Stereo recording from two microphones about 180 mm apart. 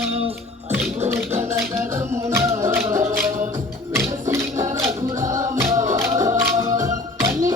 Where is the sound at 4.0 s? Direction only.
15° right (ahead or behind).